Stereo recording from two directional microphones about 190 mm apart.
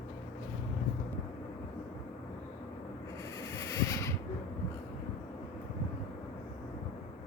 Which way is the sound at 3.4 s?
15° left (ahead or behind).